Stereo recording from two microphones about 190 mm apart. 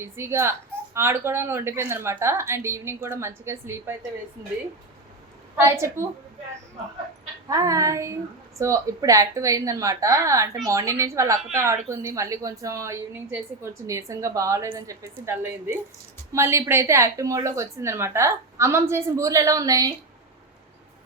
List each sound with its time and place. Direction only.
0.0 s a woman's voice: 15° right (ahead or behind)
5.5 s a woman's voice: 15° right (ahead or behind)
7.4 s a woman's voice: 15° right (ahead or behind)